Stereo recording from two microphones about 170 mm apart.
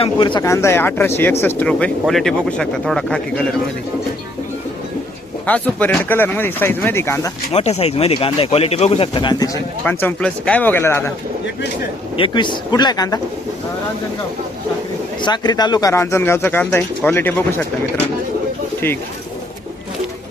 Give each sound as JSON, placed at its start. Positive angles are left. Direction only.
{"t": 0.0, "sound": "speech", "side_deg": 30}
{"t": 0.4, "sound": "speech", "side_deg": 15}
{"t": 5.5, "sound": "speech", "side_deg": 10}
{"t": 7.5, "sound": "speech", "side_deg": 40}
{"t": 9.8, "sound": "speech", "side_deg": 10}
{"t": 12.1, "sound": "speech", "side_deg": 30}
{"t": 15.2, "sound": "speech", "side_deg": 25}